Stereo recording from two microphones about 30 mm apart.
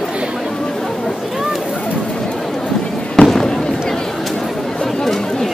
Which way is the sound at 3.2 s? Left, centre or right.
Left.